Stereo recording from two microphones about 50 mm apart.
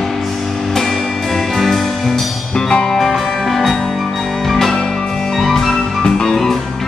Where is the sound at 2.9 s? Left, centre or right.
Centre.